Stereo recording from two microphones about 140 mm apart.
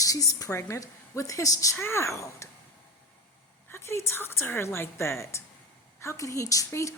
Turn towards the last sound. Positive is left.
turn(degrees=20)  # may be behind; listen again after turning